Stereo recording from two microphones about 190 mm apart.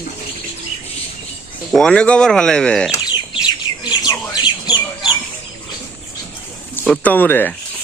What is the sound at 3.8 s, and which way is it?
Bird, 20° left (ahead or behind).